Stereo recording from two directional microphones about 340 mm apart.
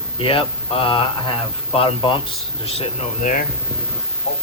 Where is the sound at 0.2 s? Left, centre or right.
Centre.